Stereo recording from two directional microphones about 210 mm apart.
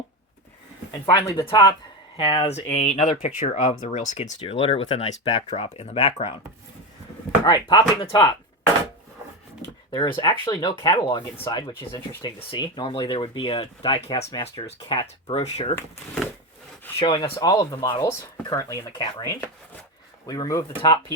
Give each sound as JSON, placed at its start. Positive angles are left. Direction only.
{"t": 1.1, "sound": "speech", "side_deg": 20}
{"t": 7.4, "sound": "speech", "side_deg": 20}
{"t": 9.9, "sound": "speech", "side_deg": 20}
{"t": 17.0, "sound": "speech", "side_deg": 25}